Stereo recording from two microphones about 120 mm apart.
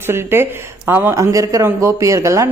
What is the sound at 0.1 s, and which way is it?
A man's voice, 20° right (ahead or behind).